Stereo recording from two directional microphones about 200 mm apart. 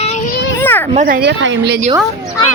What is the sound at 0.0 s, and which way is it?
Children playing, 35° left (ahead or behind).